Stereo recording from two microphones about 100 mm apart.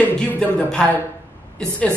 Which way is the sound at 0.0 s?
15° left (ahead or behind).